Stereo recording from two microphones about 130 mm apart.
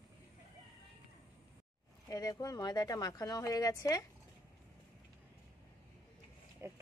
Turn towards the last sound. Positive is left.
turn(degrees=-20)  # may be behind; listen again after turning